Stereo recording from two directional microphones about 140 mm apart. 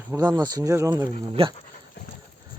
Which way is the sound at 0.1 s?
15° right (ahead or behind).